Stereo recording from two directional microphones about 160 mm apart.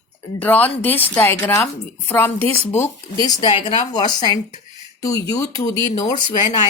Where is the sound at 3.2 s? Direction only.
25° left (ahead or behind).